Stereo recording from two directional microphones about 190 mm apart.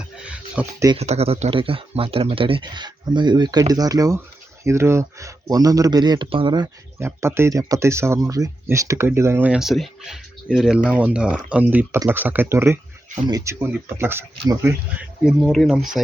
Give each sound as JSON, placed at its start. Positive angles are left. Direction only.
{"t": 0.2, "sound": "a sound", "side_deg": -5}
{"t": 0.9, "sound": "speech", "side_deg": -35}
{"t": 15.2, "sound": "speech", "side_deg": 0}